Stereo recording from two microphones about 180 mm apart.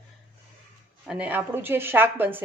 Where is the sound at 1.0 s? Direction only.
5° right (ahead or behind).